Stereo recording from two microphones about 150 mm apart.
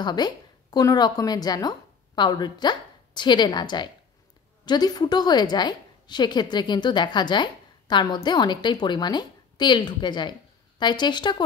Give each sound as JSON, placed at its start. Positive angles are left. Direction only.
{"t": 0.0, "sound": "a woman's voice", "side_deg": 30}